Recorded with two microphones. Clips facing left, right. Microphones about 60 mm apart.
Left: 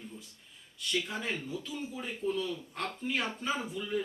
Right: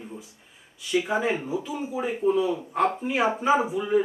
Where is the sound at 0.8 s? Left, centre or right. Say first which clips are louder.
Right 10 dB; centre.